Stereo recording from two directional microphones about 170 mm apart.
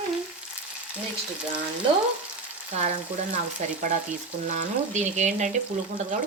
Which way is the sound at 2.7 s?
40° right (ahead or behind).